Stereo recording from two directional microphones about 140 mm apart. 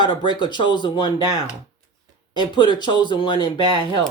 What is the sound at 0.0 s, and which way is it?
Speech, 35° left (ahead or behind).